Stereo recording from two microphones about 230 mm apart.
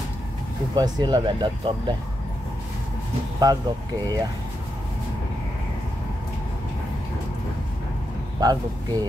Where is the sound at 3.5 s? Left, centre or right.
Centre.